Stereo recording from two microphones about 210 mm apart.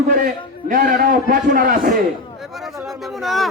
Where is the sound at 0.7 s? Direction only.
40° right (ahead or behind).